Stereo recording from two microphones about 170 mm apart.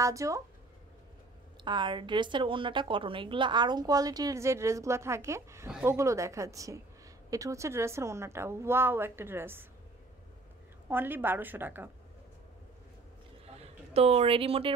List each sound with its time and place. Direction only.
0.0 s a woman's voice: 20° right (ahead or behind)
1.6 s a woman's voice: 25° right (ahead or behind); by 5.9 s 5° right (ahead or behind)
5.9 s a woman's voice: 20° right (ahead or behind)
10.9 s a woman's voice: 10° right (ahead or behind)
13.6 s speech: 35° right (ahead or behind)